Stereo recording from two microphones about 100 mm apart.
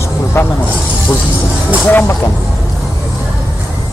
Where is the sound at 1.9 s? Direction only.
25° left (ahead or behind).